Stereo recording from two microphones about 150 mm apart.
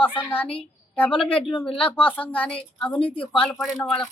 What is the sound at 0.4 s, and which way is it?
Speech, 40° left (ahead or behind).